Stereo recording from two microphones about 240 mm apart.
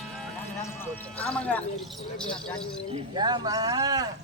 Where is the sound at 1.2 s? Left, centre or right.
Centre.